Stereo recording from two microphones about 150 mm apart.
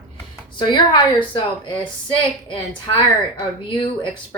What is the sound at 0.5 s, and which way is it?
A woman's voice, 30° left (ahead or behind).